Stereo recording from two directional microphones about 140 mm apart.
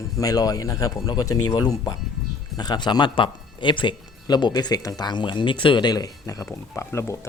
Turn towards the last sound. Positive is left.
turn(degrees=20)  # may be behind; listen again after turning